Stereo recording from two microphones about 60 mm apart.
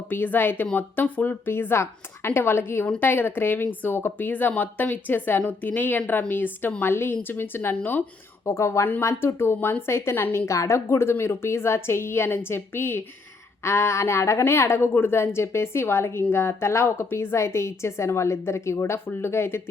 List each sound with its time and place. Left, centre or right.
0.1 s speech: left
8.4 s a woman's voice: left